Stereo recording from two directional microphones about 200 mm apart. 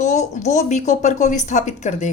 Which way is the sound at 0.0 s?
35° left (ahead or behind).